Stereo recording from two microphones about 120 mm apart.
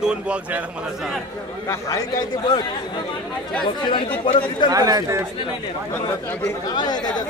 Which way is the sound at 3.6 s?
45° left (ahead or behind).